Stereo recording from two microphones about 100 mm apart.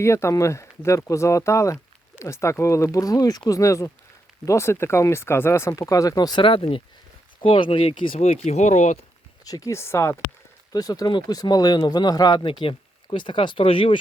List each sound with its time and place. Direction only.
0.0 s speech: 30° left (ahead or behind)
6.4 s speech: 65° left (ahead or behind)
9.4 s speech: 35° left (ahead or behind)
10.7 s speech: 40° left (ahead or behind); by 14.0 s 65° left (ahead or behind)